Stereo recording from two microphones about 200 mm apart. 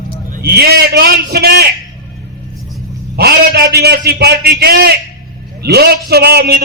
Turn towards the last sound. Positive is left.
turn(degrees=-50)  # may be behind; listen again after turning